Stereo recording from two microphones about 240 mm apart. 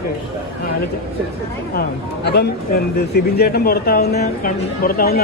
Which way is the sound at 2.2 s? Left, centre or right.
Left.